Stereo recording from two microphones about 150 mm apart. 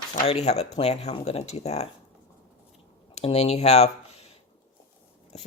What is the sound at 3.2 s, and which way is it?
Speech, 45° left (ahead or behind).